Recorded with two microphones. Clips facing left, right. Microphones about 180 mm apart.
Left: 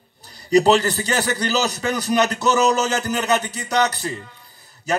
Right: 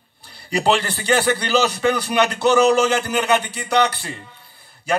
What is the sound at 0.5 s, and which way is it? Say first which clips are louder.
A man's voice: left 4 dB; 40° left (ahead or behind).